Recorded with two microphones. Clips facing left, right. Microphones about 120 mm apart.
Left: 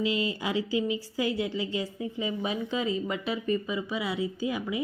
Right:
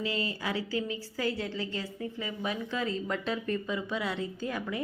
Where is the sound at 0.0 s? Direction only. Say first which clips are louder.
Left 4 dB; 15° left (ahead or behind).